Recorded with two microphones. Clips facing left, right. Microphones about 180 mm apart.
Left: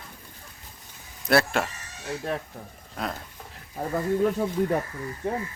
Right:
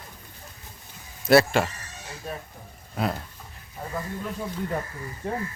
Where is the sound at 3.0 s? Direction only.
5° right (ahead or behind).